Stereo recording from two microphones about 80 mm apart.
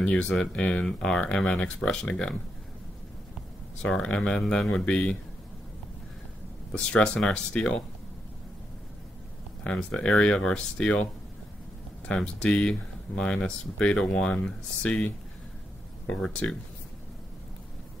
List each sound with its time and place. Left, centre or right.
0.0 s speech: centre
3.8 s speech: centre
6.9 s speech: centre
9.6 s speech: centre
12.1 s speech: centre